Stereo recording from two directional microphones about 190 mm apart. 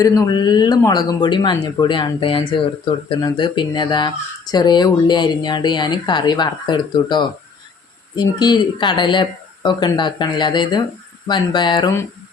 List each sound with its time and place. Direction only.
0.0 s speech: 20° left (ahead or behind)